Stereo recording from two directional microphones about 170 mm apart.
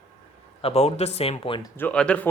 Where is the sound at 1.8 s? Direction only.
5° left (ahead or behind).